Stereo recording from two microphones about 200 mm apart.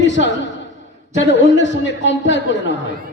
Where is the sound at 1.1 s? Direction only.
65° left (ahead or behind).